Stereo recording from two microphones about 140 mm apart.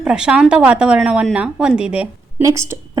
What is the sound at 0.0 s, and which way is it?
A woman's voice, 5° right (ahead or behind).